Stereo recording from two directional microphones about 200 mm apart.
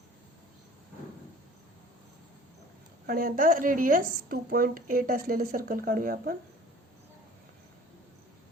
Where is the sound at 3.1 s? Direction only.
45° right (ahead or behind).